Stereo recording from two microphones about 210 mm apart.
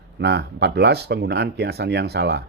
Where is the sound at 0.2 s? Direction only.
50° right (ahead or behind).